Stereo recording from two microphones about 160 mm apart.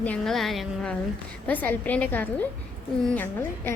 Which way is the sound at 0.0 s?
5° left (ahead or behind).